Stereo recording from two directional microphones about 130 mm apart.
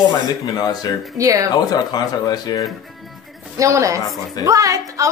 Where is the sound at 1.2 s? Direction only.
25° right (ahead or behind).